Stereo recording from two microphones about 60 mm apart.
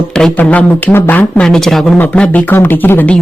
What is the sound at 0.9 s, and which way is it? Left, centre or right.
Speech, left.